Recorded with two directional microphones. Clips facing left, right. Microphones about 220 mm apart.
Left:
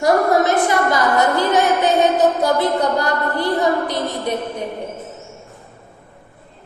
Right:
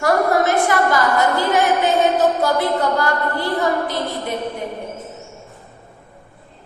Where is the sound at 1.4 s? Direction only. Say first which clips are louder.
Left 1 dB; 20° left (ahead or behind).